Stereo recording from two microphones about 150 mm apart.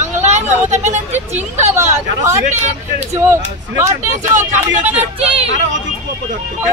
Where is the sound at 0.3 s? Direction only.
50° right (ahead or behind).